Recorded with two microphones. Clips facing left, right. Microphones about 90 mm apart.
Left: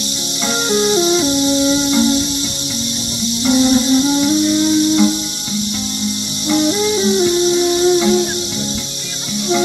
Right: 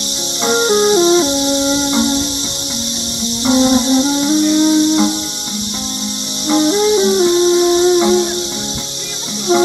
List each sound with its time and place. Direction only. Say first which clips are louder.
0.5 s music: right 4 dB; 25° right (ahead or behind)
3.4 s music: right 1 dB; 25° right (ahead or behind)
6.5 s music: right 3 dB; 25° right (ahead or behind)